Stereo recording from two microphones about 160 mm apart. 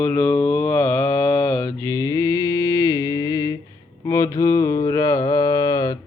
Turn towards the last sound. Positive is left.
turn(degrees=20)  # may be behind; listen again after turning